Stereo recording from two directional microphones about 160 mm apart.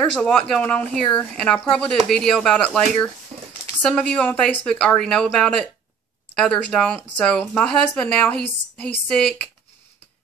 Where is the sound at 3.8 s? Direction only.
5° left (ahead or behind).